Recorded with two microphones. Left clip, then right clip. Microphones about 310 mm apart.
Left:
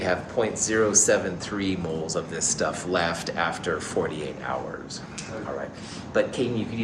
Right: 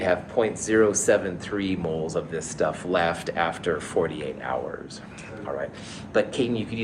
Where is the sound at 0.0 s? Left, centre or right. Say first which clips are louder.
Right 2 dB; right.